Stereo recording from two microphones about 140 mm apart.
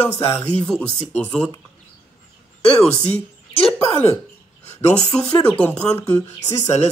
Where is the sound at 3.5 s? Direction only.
40° left (ahead or behind).